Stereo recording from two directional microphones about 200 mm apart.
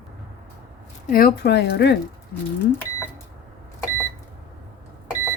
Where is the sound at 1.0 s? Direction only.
45° left (ahead or behind).